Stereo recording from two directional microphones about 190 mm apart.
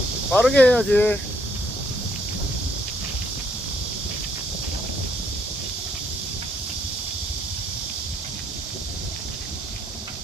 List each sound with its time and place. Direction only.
0.3 s speech: 5° left (ahead or behind)